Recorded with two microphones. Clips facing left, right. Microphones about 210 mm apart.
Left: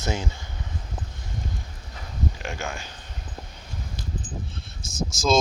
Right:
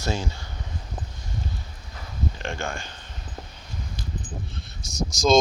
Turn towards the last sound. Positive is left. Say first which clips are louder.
# right 2 dB
turn(degrees=0)  # may be behind; listen again after turning